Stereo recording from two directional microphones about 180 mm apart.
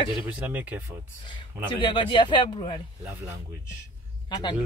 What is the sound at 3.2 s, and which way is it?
Speech, 15° right (ahead or behind).